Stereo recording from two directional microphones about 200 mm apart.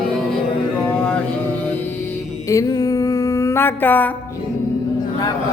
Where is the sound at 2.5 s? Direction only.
15° left (ahead or behind).